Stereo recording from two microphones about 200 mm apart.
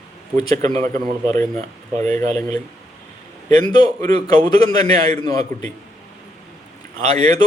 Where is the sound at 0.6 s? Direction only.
35° right (ahead or behind).